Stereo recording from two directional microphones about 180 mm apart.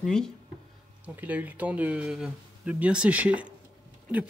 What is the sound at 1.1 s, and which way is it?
Speech, 10° right (ahead or behind).